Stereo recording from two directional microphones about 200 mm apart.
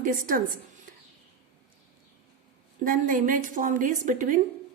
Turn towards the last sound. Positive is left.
turn(degrees=-40)  # may be behind; listen again after turning